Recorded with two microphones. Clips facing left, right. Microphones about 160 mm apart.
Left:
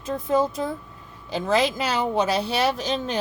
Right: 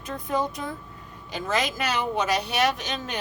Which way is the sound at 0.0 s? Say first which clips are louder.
Left 5 dB; 25° left (ahead or behind).